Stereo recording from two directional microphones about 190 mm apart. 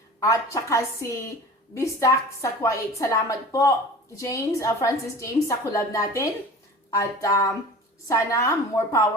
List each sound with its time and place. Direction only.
0.2 s a woman's voice: 15° left (ahead or behind)